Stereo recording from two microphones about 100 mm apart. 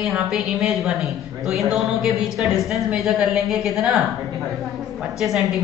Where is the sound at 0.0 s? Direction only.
Centre (ahead or behind).